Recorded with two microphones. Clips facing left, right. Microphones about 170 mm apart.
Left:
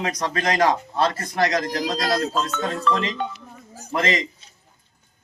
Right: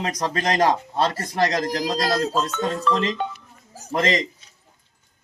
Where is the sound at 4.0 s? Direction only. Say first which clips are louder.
Right 1 dB; 40° right (ahead or behind).